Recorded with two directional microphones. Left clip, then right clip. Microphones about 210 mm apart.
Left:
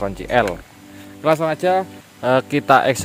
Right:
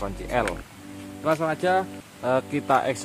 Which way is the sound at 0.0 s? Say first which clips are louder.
Left 8 dB; 35° left (ahead or behind).